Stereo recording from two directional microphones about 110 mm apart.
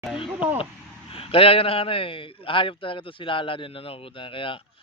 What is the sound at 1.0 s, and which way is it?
A man's voice, 60° left (ahead or behind).